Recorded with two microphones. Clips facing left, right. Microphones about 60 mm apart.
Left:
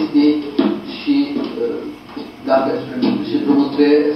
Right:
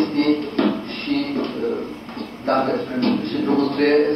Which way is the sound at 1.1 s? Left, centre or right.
Left.